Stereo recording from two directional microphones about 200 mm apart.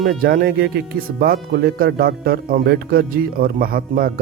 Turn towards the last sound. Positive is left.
turn(degrees=-50)  # may be behind; listen again after turning